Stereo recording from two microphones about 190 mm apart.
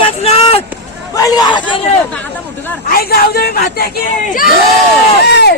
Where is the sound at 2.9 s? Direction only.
50° left (ahead or behind).